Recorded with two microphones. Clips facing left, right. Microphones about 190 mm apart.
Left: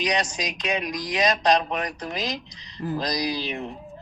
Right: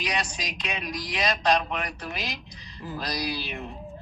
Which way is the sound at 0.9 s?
15° left (ahead or behind).